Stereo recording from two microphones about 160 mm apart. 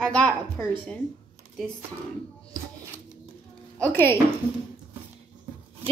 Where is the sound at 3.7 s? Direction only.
10° left (ahead or behind).